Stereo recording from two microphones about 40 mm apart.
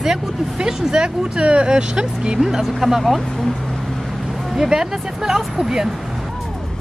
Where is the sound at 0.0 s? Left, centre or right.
Centre.